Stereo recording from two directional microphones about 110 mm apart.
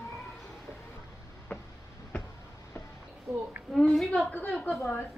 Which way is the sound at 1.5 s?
20° left (ahead or behind).